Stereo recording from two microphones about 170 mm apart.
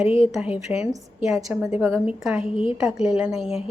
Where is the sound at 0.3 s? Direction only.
5° right (ahead or behind).